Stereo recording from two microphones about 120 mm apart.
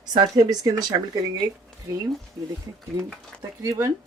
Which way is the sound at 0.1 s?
35° right (ahead or behind).